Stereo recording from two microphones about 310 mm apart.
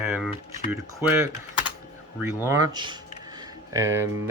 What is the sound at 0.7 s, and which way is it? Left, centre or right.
Speech, centre.